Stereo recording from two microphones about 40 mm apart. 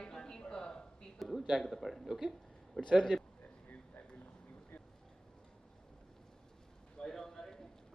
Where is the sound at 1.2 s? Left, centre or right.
Centre.